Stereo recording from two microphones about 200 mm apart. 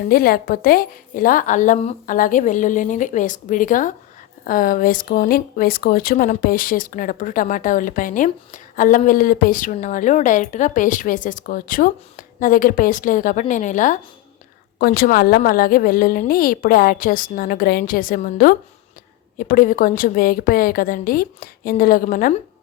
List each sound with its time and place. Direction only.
0.1 s a woman's voice: 45° left (ahead or behind)